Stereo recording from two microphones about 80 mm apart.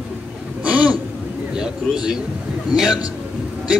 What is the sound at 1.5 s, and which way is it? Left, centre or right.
A man's voice, centre.